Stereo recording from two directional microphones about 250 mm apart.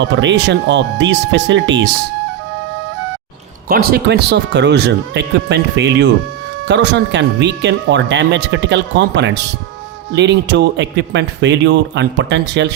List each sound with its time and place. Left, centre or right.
0.0 s speech: right
3.7 s speech: right